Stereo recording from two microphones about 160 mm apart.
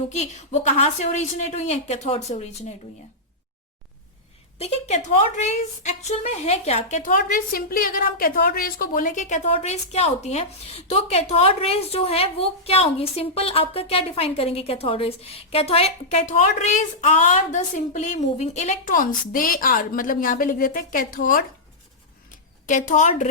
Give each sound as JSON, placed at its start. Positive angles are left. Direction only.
{"t": 0.1, "sound": "a woman's voice", "side_deg": 45}
{"t": 4.5, "sound": "a woman's voice", "side_deg": 40}
{"t": 22.6, "sound": "a woman's voice", "side_deg": 55}